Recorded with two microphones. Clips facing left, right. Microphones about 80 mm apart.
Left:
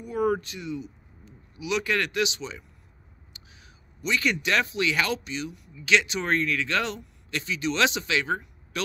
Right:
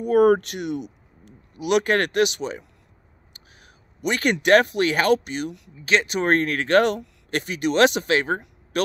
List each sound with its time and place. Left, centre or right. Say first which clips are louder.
0.0 s speech: right 9 dB; right
1.5 s speech: right 7 dB; right
5.8 s a man's voice: right 3 dB; right